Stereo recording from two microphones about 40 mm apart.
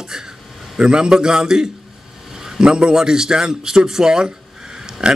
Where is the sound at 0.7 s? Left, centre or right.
Right.